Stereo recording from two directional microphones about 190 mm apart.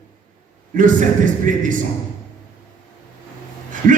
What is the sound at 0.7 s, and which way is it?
A man's voice, 45° right (ahead or behind).